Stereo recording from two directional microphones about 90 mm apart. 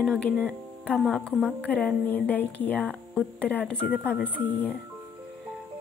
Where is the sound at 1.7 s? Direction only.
10° left (ahead or behind).